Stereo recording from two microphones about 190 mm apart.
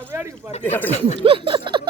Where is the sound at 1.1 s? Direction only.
30° right (ahead or behind).